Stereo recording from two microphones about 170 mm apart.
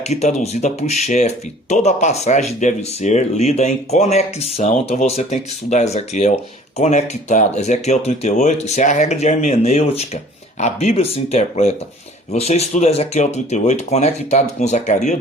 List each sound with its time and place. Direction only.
0.1 s speech: 40° left (ahead or behind)